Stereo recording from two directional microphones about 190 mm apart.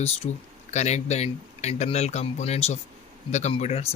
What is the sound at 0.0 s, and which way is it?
Speech, 35° left (ahead or behind).